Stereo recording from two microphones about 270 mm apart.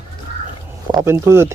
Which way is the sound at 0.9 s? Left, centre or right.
Centre.